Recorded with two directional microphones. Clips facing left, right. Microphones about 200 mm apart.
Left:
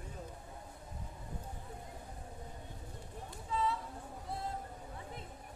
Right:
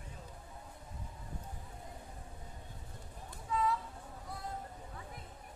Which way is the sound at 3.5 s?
30° left (ahead or behind).